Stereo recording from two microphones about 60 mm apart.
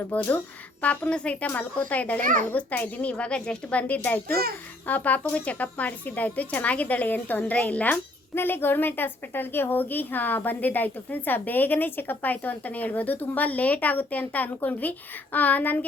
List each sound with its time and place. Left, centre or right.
0.1 s a woman's voice: left
0.9 s a child's voice: left
8.4 s a woman's voice: left